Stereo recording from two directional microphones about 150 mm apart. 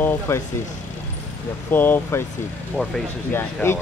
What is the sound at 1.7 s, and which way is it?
Speech, 15° left (ahead or behind).